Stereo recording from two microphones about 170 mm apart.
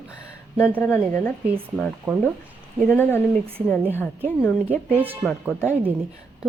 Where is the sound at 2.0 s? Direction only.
10° right (ahead or behind).